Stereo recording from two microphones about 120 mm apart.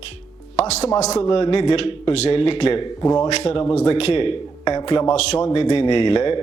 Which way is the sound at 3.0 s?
30° left (ahead or behind).